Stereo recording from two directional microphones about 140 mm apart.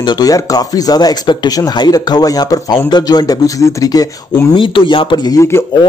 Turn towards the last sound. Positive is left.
turn(degrees=20)  # may be behind; listen again after turning